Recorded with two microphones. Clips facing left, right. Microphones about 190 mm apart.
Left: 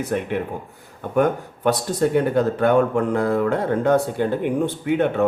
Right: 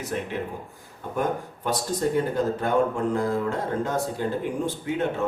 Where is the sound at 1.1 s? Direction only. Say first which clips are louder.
Left 7 dB; 70° left (ahead or behind).